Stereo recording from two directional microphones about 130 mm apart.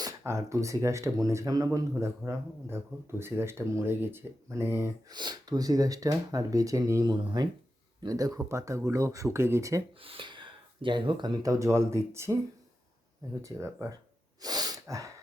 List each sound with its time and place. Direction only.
0.2 s speech: 20° right (ahead or behind)
5.1 s speech: 35° right (ahead or behind)
7.1 s speech: 35° right (ahead or behind)
10.0 s speech: 40° right (ahead or behind)
11.4 s speech: 25° right (ahead or behind)
14.4 s sneeze: 30° right (ahead or behind)